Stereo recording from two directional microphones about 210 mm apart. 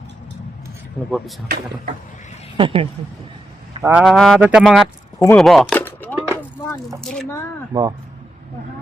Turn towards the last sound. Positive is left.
turn(degrees=-15)  # may be behind; listen again after turning